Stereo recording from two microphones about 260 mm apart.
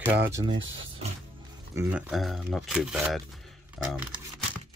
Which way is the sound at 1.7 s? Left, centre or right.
Centre.